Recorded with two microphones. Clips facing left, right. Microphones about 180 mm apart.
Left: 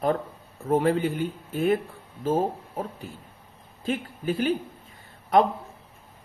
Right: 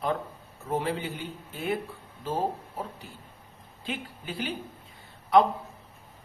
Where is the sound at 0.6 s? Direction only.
45° left (ahead or behind).